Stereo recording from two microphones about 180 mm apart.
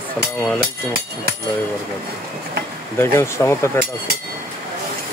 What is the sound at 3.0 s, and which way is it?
Speech, 15° left (ahead or behind).